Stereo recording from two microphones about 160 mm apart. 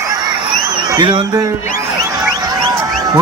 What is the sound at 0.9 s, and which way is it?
A man's voice, 30° right (ahead or behind).